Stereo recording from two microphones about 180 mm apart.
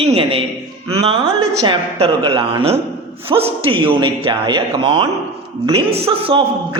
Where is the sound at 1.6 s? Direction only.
25° right (ahead or behind).